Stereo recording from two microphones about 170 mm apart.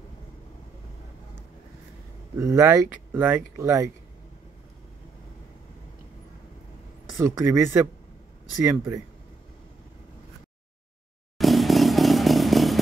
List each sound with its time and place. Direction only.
2.3 s speech: 15° right (ahead or behind)
7.2 s speech: 15° right (ahead or behind)
11.3 s motorcycle: centre (ahead or behind)